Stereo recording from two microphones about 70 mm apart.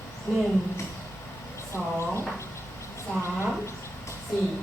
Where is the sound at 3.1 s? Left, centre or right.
Centre.